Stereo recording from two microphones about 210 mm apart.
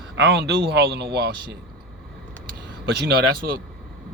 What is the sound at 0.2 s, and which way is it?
Speech, 55° right (ahead or behind).